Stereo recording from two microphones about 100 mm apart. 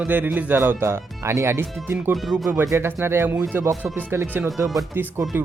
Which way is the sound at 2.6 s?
30° right (ahead or behind).